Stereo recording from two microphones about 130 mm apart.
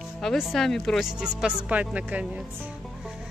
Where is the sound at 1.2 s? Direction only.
5° right (ahead or behind).